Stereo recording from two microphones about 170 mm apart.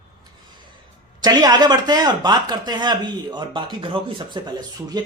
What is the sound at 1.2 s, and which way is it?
Speech, 25° right (ahead or behind).